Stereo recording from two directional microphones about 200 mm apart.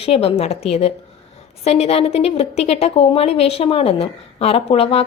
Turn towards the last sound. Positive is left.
turn(degrees=30)  # may be behind; listen again after turning